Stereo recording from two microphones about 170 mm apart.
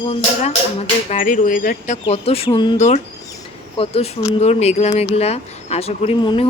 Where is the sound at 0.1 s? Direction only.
40° left (ahead or behind).